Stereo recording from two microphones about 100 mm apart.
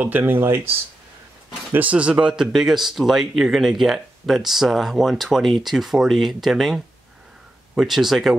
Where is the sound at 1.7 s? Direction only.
15° right (ahead or behind).